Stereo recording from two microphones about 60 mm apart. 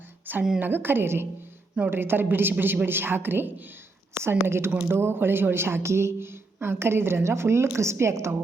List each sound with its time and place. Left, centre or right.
0.3 s a woman's voice: right